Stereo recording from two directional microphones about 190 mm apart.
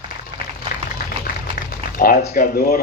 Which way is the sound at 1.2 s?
50° left (ahead or behind).